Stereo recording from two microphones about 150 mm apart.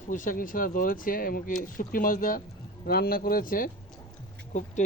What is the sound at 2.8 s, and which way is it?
Speech, 85° left.